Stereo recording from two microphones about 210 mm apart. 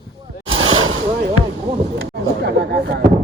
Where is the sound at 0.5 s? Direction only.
75° right (ahead or behind).